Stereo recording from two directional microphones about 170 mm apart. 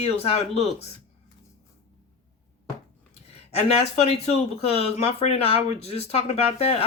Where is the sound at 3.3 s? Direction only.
40° left (ahead or behind).